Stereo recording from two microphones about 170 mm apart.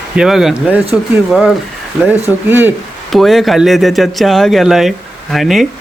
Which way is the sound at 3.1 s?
Centre (ahead or behind).